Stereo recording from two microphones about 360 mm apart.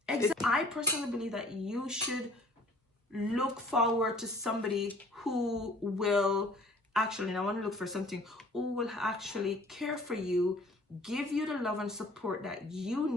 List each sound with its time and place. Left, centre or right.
0.0 s speech: centre
3.2 s speech: centre